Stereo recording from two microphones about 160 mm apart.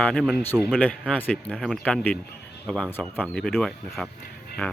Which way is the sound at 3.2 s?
Centre (ahead or behind).